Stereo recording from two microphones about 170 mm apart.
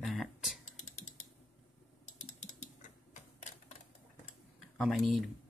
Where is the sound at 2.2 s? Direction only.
45° left (ahead or behind).